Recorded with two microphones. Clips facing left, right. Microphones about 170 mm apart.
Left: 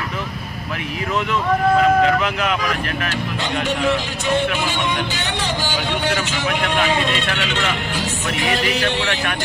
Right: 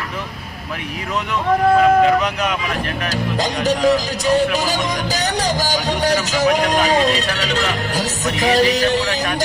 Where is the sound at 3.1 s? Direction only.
40° right (ahead or behind).